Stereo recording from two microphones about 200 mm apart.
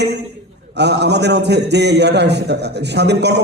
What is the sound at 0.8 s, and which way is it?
A man's voice, 60° right (ahead or behind).